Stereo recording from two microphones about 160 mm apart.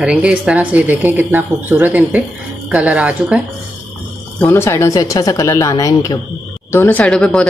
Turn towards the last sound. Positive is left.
turn(degrees=5)  # may be behind; listen again after turning